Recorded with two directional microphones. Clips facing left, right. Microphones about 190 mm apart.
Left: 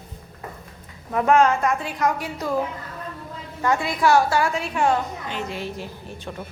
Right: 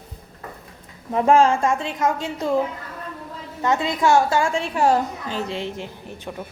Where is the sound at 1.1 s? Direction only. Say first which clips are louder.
Right 2 dB; 30° right (ahead or behind).